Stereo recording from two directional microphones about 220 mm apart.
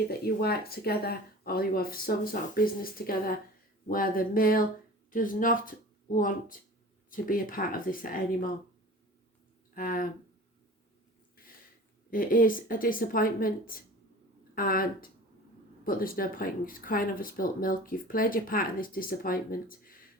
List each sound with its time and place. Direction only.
0.3 s speech: 45° left (ahead or behind)
9.7 s speech: 40° left (ahead or behind)
12.1 s speech: 40° left (ahead or behind)